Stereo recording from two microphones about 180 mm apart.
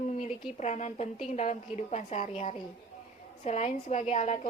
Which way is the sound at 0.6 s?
40° left (ahead or behind).